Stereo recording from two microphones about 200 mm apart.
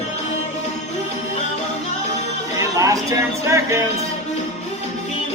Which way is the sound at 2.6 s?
15° right (ahead or behind).